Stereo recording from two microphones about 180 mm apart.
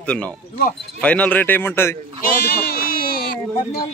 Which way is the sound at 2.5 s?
60° left (ahead or behind).